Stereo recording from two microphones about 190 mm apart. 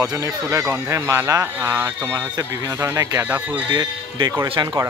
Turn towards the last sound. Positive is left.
turn(degrees=-20)  # may be behind; listen again after turning